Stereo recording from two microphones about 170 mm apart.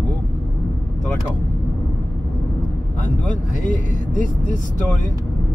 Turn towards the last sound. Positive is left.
turn(degrees=50)  # may be behind; listen again after turning